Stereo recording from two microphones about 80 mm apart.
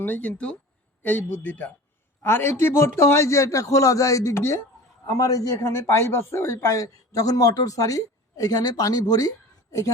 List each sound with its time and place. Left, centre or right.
0.0 s speech: left
2.2 s a man's voice: left